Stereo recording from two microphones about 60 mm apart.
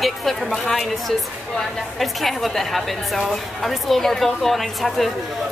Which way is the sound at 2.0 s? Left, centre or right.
Centre.